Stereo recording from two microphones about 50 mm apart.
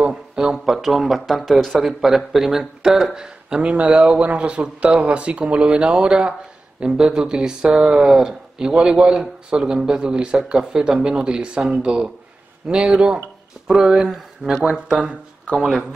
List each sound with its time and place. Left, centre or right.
0.1 s speech: centre